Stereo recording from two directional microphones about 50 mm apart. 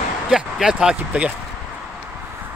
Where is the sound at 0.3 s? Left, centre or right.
Centre.